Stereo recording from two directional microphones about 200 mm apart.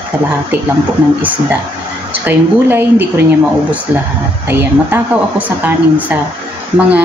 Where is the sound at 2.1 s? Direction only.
10° right (ahead or behind).